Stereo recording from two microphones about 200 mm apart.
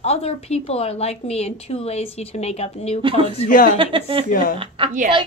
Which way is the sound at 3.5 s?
45° left (ahead or behind).